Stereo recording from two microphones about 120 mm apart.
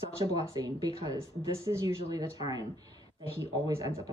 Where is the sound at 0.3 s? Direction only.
30° right (ahead or behind).